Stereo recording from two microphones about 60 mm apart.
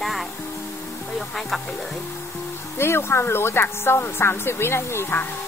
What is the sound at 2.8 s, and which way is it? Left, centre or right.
Speech, left.